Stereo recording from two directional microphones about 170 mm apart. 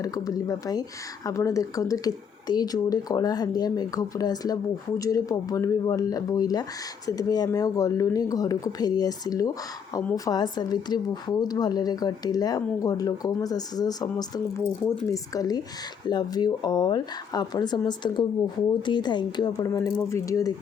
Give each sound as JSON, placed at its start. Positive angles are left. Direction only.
{"t": 0.0, "sound": "speech", "side_deg": 20}